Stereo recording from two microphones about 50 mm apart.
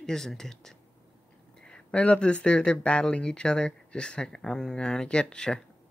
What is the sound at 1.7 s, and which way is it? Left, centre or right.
Speech, centre.